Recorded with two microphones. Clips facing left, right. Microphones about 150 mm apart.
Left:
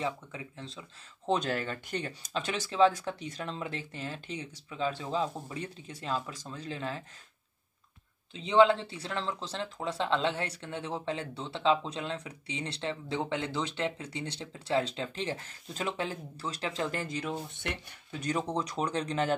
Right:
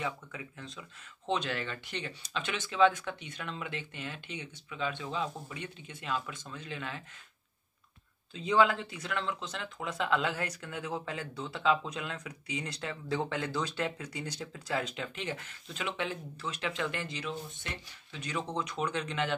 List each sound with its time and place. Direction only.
0.0 s speech: 30° left (ahead or behind)
8.3 s speech: 25° left (ahead or behind)